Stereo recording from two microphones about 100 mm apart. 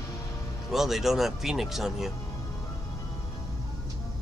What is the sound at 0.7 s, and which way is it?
Speech, centre (ahead or behind).